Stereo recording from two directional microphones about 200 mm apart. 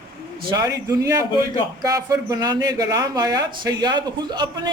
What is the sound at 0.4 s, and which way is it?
A man's voice, 20° right (ahead or behind).